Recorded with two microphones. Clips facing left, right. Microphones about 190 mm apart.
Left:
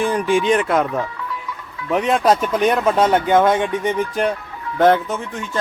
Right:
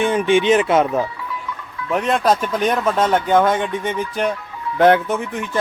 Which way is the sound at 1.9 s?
Centre (ahead or behind).